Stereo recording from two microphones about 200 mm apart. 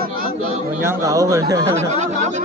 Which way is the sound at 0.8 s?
15° right (ahead or behind).